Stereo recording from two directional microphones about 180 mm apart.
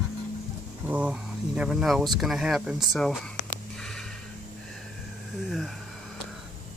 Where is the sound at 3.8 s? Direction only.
5° left (ahead or behind).